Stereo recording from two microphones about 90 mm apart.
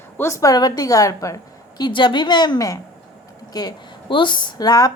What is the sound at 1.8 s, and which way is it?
A woman's voice, 60° left (ahead or behind).